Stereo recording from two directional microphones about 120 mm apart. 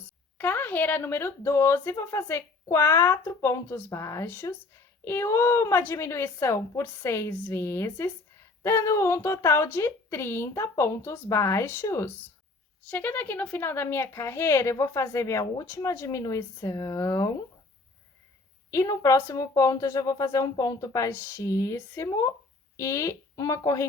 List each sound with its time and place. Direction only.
0.3 s speech: 15° left (ahead or behind)
18.7 s speech: 25° left (ahead or behind)